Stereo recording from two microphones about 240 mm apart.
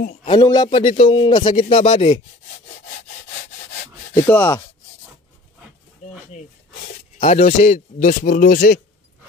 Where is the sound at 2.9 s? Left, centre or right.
Left.